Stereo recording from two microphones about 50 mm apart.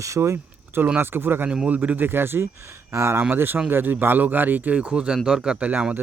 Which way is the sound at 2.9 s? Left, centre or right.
Right.